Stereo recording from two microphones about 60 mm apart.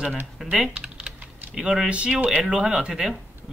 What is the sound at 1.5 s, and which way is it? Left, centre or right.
Speech, centre.